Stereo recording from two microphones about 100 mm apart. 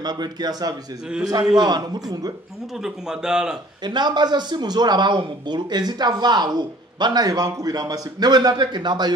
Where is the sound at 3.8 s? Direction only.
50° right (ahead or behind).